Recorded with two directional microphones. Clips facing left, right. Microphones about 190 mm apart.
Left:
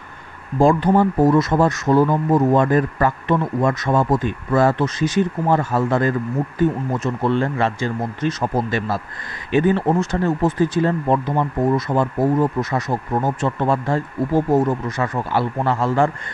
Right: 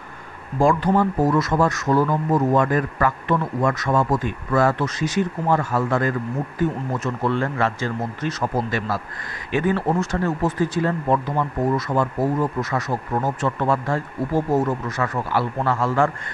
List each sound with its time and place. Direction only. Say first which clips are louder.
0.6 s speech: left 3 dB; 25° left (ahead or behind)
7.2 s speech: left 3 dB; 20° left (ahead or behind)